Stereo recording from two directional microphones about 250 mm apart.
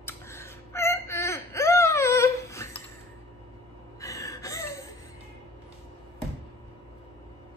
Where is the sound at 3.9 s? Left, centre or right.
Centre.